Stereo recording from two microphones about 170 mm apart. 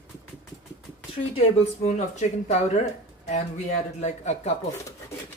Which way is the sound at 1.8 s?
45° left (ahead or behind).